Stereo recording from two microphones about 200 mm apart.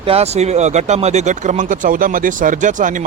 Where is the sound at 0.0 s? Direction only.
30° right (ahead or behind).